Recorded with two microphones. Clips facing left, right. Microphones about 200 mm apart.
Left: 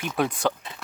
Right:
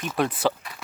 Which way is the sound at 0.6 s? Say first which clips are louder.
Left 1 dB; 25° left (ahead or behind).